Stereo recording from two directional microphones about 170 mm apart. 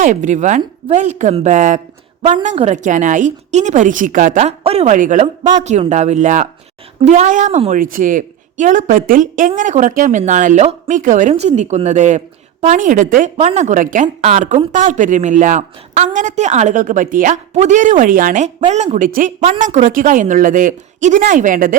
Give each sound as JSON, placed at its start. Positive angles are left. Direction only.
{"t": 0.0, "sound": "a woman's voice", "side_deg": -50}
{"t": 13.3, "sound": "a woman's voice", "side_deg": -40}